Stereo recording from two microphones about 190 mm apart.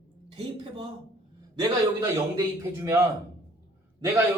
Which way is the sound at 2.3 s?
15° right (ahead or behind).